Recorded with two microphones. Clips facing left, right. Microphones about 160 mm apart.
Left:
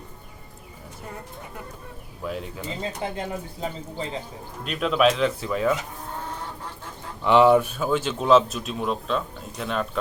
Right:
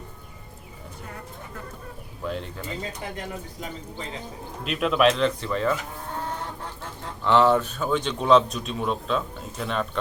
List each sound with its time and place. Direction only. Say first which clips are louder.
2.2 s a man's voice: even; 5° left (ahead or behind)
3.0 s speech: left 4 dB; 30° left (ahead or behind)
4.6 s a man's voice: even; centre (ahead or behind)
7.3 s a man's voice: left 3 dB; 15° left (ahead or behind)